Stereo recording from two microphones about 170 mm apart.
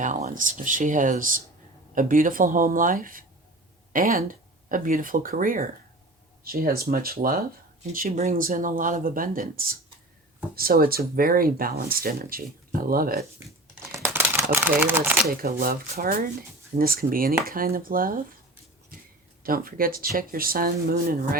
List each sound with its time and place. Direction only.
0.0 s speech: 45° right (ahead or behind)
13.9 s crumpling: 15° right (ahead or behind)
15.3 s speech: 60° right (ahead or behind)
19.4 s speech: 60° right (ahead or behind)